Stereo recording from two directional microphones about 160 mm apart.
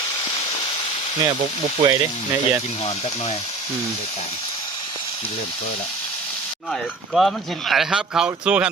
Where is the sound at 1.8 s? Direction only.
30° right (ahead or behind).